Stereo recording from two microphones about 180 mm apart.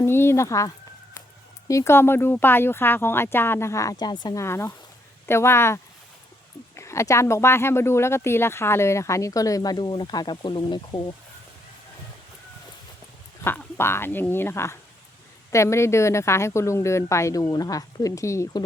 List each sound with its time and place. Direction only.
0.0 s speech: 15° left (ahead or behind)
13.4 s speech: 15° left (ahead or behind)